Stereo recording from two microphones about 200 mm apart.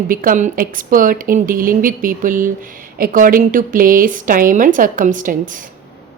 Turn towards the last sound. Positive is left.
turn(degrees=-40)  # may be behind; listen again after turning